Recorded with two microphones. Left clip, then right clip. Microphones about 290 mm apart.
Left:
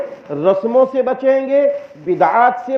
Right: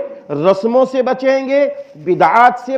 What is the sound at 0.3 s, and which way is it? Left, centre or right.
A man's voice, right.